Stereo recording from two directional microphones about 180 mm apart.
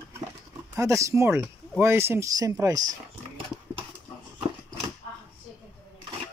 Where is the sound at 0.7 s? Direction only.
15° right (ahead or behind).